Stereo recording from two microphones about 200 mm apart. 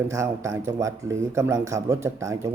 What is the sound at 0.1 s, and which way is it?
Speech, 15° right (ahead or behind).